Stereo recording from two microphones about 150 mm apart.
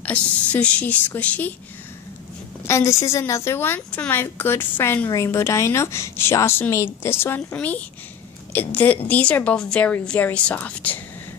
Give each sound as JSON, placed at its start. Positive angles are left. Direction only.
{"t": 0.0, "sound": "a woman's voice", "side_deg": 10}
{"t": 2.6, "sound": "a woman's voice", "side_deg": 20}